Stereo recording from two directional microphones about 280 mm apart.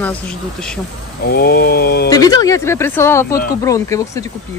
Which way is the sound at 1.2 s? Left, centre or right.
Left.